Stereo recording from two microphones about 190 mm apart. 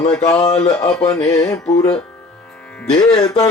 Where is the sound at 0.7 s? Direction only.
20° left (ahead or behind).